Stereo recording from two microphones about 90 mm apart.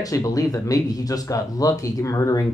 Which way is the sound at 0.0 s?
40° left (ahead or behind).